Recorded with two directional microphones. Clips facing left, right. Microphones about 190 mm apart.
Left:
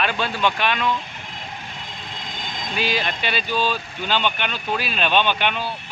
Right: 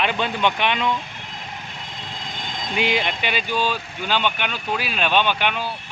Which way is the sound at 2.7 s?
20° right (ahead or behind).